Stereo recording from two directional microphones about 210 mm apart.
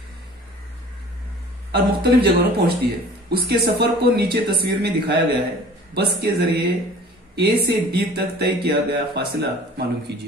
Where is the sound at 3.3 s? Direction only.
45° right (ahead or behind).